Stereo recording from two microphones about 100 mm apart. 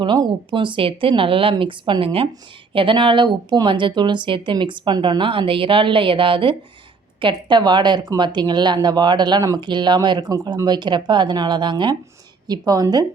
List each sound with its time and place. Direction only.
0.5 s a woman's voice: 55° right (ahead or behind); by 13.1 s 40° right (ahead or behind)